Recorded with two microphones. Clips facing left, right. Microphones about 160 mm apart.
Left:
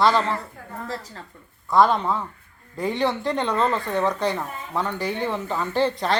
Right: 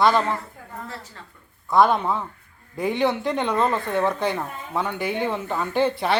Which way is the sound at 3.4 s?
10° right (ahead or behind).